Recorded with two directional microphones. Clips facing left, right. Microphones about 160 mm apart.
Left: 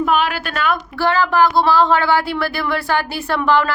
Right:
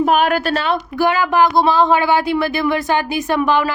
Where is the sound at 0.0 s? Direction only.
45° right (ahead or behind).